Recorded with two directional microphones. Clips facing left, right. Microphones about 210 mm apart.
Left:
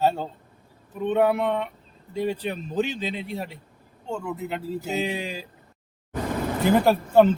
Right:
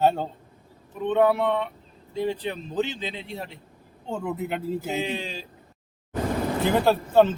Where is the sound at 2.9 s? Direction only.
25° right (ahead or behind).